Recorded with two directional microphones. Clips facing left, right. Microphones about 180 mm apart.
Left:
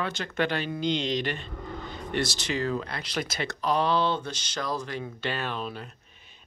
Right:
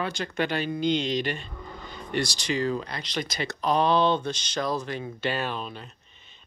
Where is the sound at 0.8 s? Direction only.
45° right (ahead or behind).